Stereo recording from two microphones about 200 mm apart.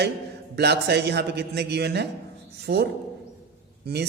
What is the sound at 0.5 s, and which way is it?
Speech, 55° right (ahead or behind).